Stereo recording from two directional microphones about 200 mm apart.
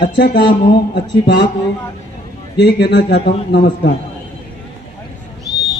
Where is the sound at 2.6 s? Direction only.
55° left (ahead or behind).